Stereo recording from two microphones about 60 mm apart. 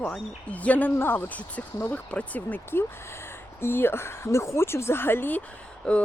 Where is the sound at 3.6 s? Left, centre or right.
Left.